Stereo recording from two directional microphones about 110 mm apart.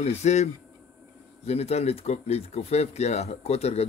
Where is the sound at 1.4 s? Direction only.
70° left (ahead or behind).